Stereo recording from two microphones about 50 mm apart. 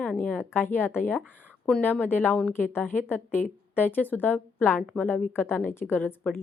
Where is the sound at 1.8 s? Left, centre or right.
Left.